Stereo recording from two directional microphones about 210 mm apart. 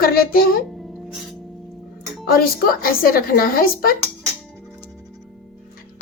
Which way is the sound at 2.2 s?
45° left (ahead or behind).